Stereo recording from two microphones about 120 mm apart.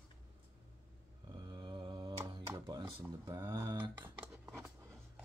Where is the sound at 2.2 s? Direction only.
35° right (ahead or behind).